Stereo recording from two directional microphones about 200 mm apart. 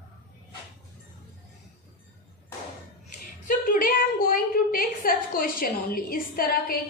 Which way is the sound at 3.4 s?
45° left (ahead or behind).